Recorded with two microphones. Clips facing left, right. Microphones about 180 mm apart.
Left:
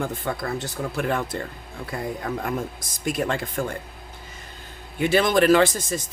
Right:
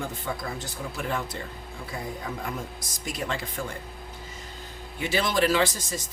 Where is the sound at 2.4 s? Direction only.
55° left (ahead or behind).